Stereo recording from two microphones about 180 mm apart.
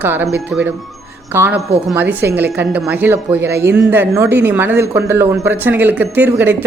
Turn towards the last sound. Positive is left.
turn(degrees=-10)  # may be behind; listen again after turning